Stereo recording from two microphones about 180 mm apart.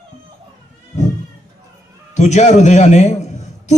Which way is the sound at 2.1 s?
40° left (ahead or behind).